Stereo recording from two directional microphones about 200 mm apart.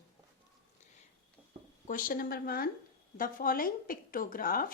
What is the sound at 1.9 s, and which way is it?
A woman's voice, 45° left (ahead or behind).